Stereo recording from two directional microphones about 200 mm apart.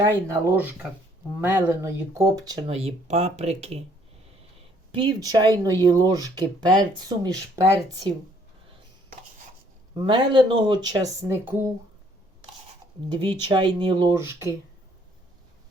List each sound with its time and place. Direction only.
0.0 s speech: 10° right (ahead or behind); by 3.8 s 30° right (ahead or behind)
4.9 s speech: 20° right (ahead or behind)
9.9 s speech: 25° right (ahead or behind)
13.1 s speech: 25° right (ahead or behind)